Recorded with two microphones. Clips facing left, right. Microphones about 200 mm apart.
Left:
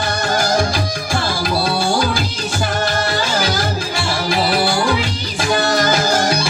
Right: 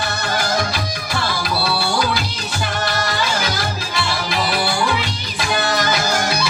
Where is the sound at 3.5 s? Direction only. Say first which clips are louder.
Left 4 dB; 45° left (ahead or behind).